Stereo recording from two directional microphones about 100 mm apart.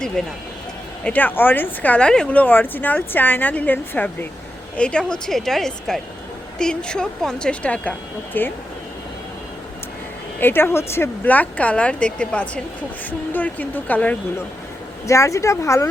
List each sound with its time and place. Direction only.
0.2 s a woman's voice: 5° left (ahead or behind)
10.4 s speech: 20° left (ahead or behind)
15.0 s speech: 30° left (ahead or behind)